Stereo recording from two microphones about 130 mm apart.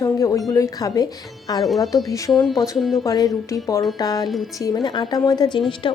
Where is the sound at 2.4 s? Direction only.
Centre (ahead or behind).